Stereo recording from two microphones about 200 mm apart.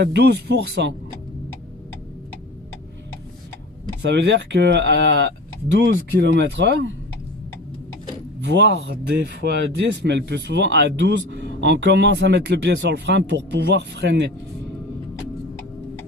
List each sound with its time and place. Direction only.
0.0 s speech: 55° right (ahead or behind)
4.0 s speech: 60° right (ahead or behind)
8.4 s speech: 60° right (ahead or behind)